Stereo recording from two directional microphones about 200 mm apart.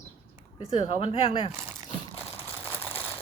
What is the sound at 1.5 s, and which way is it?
Crumpling, 15° right (ahead or behind).